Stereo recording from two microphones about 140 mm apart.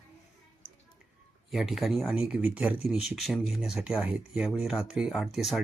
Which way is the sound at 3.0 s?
Centre (ahead or behind).